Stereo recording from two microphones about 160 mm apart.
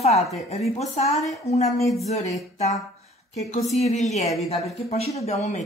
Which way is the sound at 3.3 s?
45° left (ahead or behind).